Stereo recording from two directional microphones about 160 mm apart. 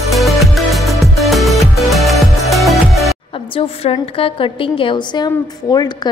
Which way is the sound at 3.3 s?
35° left (ahead or behind).